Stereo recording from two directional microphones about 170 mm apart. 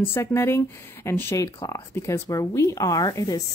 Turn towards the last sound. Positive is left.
turn(degrees=20)  # may be behind; listen again after turning